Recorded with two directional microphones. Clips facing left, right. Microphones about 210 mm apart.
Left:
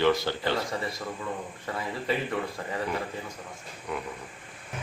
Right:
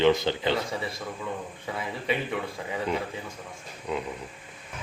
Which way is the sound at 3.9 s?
20° right (ahead or behind).